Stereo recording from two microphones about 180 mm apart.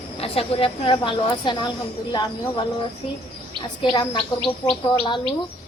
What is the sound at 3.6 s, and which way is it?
Speech, 25° left (ahead or behind).